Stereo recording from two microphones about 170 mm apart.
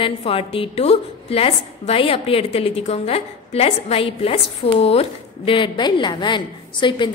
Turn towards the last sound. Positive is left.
turn(degrees=30)  # may be behind; listen again after turning